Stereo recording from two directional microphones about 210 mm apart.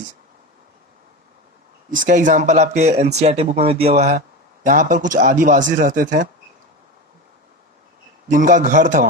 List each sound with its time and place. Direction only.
1.9 s speech: 40° right (ahead or behind)
8.3 s speech: 40° right (ahead or behind)